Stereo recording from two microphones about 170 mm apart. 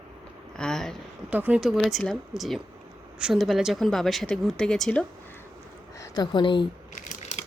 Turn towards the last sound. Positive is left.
turn(degrees=40)  # may be behind; listen again after turning